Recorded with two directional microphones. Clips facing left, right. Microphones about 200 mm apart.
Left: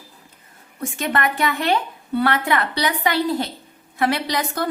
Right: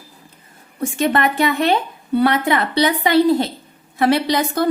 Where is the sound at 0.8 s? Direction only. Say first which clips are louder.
Right 5 dB; 30° right (ahead or behind).